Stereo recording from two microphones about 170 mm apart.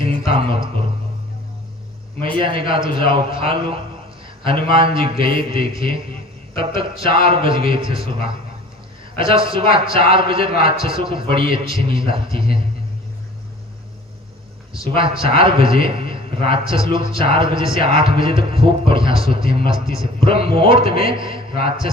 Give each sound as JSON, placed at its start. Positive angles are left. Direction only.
{"t": 0.3, "sound": "speech", "side_deg": -30}
{"t": 2.4, "sound": "a man's voice", "side_deg": -30}
{"t": 15.2, "sound": "a man's voice", "side_deg": -30}